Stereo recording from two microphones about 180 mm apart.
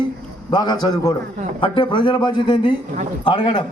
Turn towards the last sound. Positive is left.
turn(degrees=25)  # may be behind; listen again after turning